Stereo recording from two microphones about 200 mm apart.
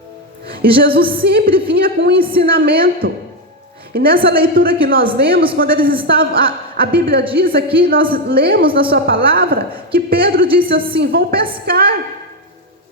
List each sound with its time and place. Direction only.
0.6 s a woman's voice: 50° right (ahead or behind)